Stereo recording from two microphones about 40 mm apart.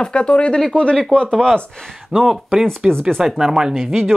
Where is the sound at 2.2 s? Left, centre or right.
Centre.